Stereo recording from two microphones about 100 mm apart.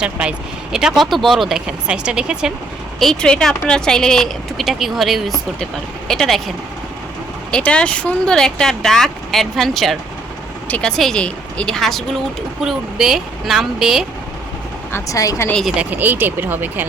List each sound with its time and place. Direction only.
0.0 s speech: 10° right (ahead or behind)
3.0 s speech: 5° left (ahead or behind)
7.5 s speech: 10° left (ahead or behind)
14.9 s speech: 35° left (ahead or behind)
15.6 s speech: 15° right (ahead or behind)